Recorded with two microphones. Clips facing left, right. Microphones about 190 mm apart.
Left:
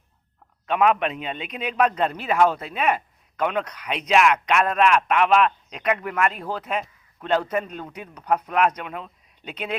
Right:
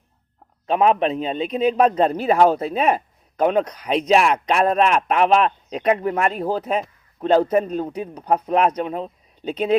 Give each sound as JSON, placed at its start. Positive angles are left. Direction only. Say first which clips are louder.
{"t": 0.7, "sound": "a man's voice", "louder": "right 3 dB", "side_deg": -35}